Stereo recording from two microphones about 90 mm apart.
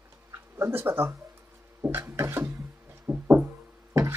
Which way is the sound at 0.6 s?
25° right (ahead or behind).